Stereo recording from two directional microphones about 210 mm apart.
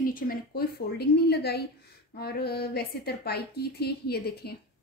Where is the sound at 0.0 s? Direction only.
45° left (ahead or behind).